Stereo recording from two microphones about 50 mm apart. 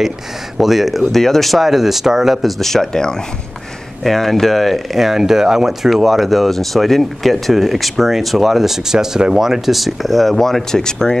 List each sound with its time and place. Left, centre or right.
0.6 s speech: centre
2.6 s speech: centre